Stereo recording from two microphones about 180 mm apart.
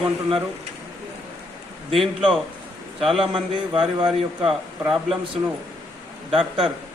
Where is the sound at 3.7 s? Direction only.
30° right (ahead or behind).